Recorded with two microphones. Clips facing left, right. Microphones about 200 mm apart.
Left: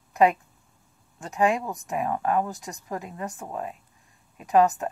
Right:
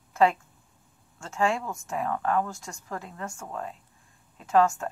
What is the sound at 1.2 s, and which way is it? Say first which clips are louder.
Speech: left 3 dB; 15° left (ahead or behind).